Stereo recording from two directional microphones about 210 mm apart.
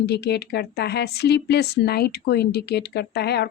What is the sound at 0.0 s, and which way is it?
Speech, 50° left (ahead or behind).